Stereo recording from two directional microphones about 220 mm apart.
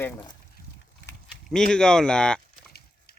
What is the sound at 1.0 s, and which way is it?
Livestock, 55° left (ahead or behind).